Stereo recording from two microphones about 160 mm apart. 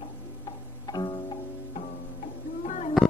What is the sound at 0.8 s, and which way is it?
Pizzicato, 25° left (ahead or behind).